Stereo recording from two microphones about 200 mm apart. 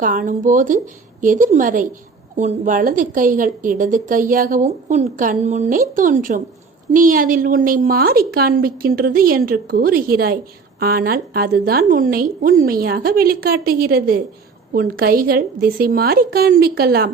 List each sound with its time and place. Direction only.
0.0 s a woman's voice: 40° right (ahead or behind)